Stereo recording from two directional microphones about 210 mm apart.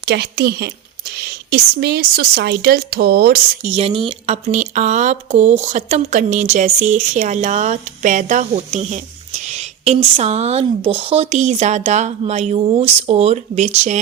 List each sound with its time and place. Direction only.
0.0 s speech: 50° right (ahead or behind)
3.7 s speech: 30° right (ahead or behind)